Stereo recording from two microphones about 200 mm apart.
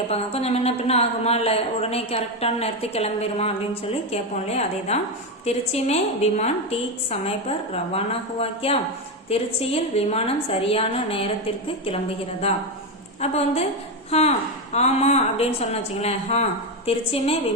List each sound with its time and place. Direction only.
0.1 s a woman's voice: 30° left (ahead or behind)
13.2 s a woman's voice: 30° left (ahead or behind)